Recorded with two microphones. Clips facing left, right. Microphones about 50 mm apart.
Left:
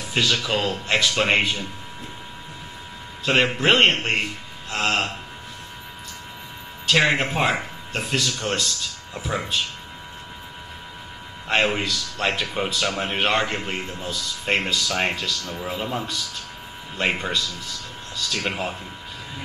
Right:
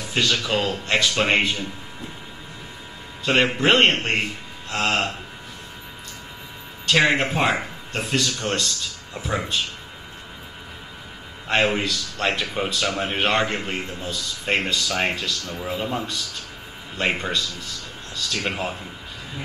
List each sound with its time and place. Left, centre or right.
0.0 s speech: centre
3.3 s speech: centre
6.9 s speech: centre
11.4 s speech: centre